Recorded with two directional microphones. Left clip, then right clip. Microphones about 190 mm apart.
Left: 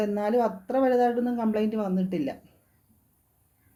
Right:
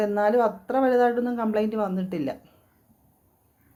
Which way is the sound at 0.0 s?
5° right (ahead or behind).